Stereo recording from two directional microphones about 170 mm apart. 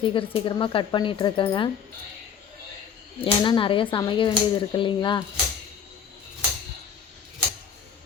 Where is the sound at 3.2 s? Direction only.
30° left (ahead or behind).